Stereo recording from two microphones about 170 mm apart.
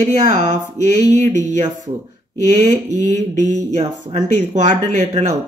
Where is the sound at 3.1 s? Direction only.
40° right (ahead or behind).